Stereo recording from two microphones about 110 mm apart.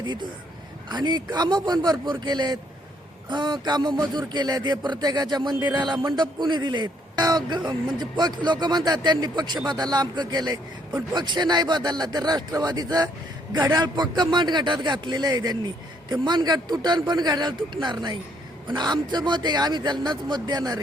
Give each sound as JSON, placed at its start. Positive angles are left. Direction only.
{"t": 0.0, "sound": "a man's voice", "side_deg": -45}